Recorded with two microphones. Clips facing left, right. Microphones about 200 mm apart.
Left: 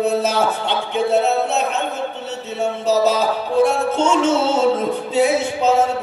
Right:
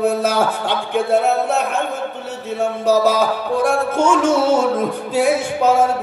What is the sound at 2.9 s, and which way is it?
Music, 25° left (ahead or behind).